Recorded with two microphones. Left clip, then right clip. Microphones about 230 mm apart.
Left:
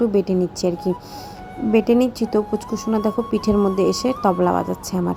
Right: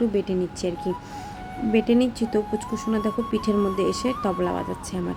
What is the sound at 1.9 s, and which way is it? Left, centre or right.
Speech, centre.